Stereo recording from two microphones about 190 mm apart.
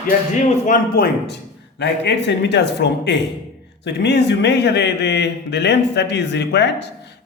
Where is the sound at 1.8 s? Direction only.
65° left (ahead or behind).